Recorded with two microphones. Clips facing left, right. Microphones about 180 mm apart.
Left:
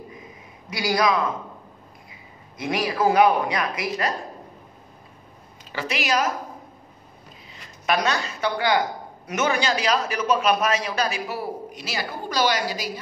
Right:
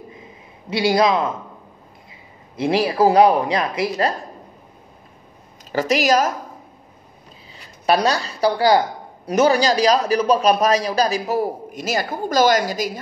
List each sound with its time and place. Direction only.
0.7 s speech: 30° right (ahead or behind)
2.5 s speech: 30° right (ahead or behind)
5.7 s speech: 40° right (ahead or behind)
7.5 s speech: 35° right (ahead or behind)